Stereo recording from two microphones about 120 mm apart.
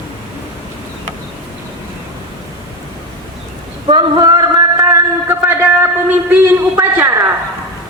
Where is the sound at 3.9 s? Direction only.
35° right (ahead or behind).